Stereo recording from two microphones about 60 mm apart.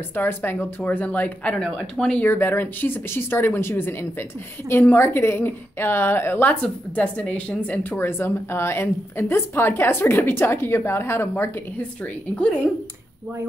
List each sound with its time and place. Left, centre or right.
0.1 s a woman's voice: left
2.0 s speech: centre
2.2 s a woman's voice: left
6.5 s a woman's voice: left
8.0 s a woman's voice: left
12.0 s a woman's voice: left